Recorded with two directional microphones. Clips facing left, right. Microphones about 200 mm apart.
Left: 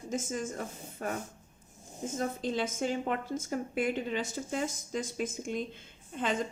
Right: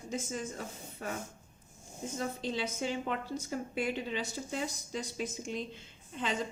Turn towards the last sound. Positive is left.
turn(degrees=50)  # may be behind; listen again after turning